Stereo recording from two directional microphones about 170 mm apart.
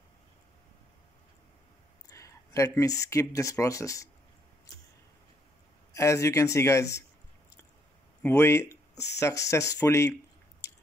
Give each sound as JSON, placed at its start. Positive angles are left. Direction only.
{"t": 2.0, "sound": "speech", "side_deg": 20}
{"t": 5.9, "sound": "speech", "side_deg": 15}
{"t": 8.2, "sound": "speech", "side_deg": 15}